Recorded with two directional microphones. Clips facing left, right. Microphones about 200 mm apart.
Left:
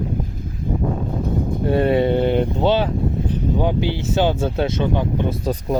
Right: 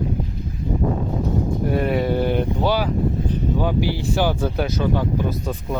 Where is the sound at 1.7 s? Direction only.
30° left (ahead or behind).